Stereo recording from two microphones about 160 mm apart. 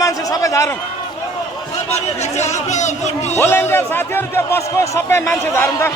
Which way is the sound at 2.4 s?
45° left (ahead or behind).